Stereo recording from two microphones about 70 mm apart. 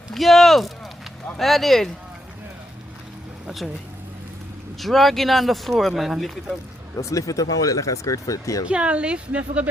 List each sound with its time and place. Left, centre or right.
0.1 s speech: centre
3.4 s speech: centre
4.8 s speech: centre
6.9 s speech: left
8.6 s a woman's voice: centre